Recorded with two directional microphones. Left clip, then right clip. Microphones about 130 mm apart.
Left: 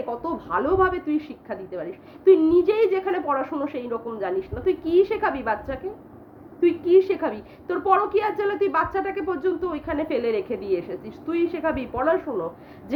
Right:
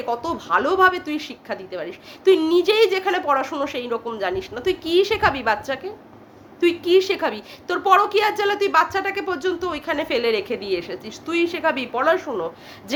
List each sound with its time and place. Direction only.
0.1 s a woman's voice: 20° right (ahead or behind)